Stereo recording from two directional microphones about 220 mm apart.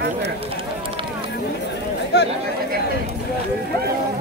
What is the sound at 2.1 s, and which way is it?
Chatter, 50° left (ahead or behind).